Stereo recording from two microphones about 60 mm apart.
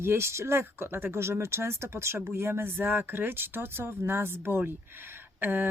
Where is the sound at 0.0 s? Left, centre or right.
Right.